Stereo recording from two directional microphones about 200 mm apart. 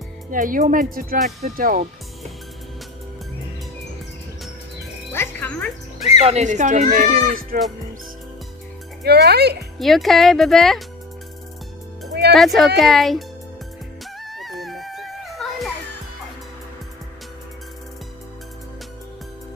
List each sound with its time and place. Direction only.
0.3 s speech: 40° right (ahead or behind)
5.1 s music: 10° left (ahead or behind)
6.2 s speech: 35° right (ahead or behind)
9.0 s speech: 55° right (ahead or behind)
9.8 s speech: centre (ahead or behind)
12.1 s music: 55° right (ahead or behind)
12.4 s speech: centre (ahead or behind)
14.2 s music: centre (ahead or behind)